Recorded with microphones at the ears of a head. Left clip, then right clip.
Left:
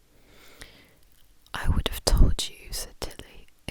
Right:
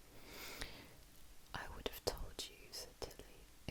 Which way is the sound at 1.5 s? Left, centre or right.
Left.